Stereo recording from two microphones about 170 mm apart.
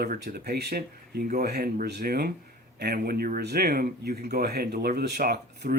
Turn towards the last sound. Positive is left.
turn(degrees=-65)  # may be behind; listen again after turning